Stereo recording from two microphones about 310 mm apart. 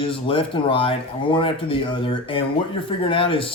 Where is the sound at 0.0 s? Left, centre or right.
Centre.